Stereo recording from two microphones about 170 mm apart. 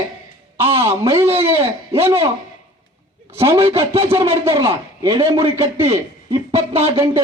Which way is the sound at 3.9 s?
35° right (ahead or behind).